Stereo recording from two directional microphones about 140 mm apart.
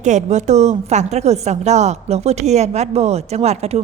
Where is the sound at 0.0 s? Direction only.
55° right (ahead or behind).